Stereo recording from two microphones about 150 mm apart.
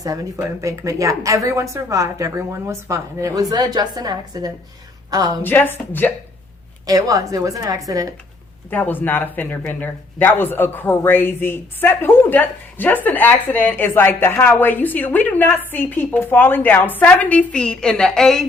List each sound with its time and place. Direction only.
0.0 s a woman's voice: 25° right (ahead or behind)
5.4 s speech: 15° left (ahead or behind)
6.8 s a woman's voice: 25° right (ahead or behind)
8.7 s speech: 10° left (ahead or behind)